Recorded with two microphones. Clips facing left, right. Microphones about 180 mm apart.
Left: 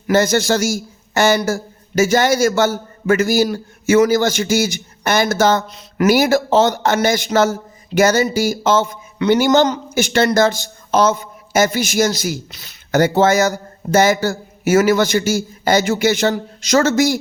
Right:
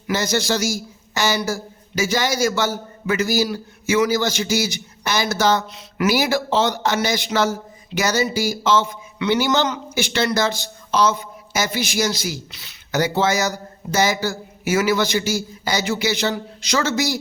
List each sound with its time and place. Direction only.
0.1 s a man's voice: 50° left (ahead or behind)